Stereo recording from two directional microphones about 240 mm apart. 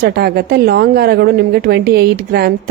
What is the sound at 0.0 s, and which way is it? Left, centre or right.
A woman's voice, right.